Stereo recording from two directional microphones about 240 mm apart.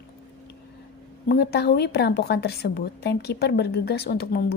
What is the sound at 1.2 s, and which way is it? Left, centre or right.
A woman's voice, left.